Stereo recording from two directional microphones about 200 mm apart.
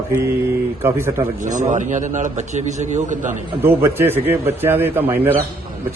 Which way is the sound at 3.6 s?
10° right (ahead or behind).